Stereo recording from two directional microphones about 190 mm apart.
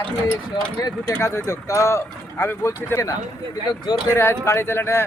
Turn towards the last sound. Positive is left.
turn(degrees=15)  # may be behind; listen again after turning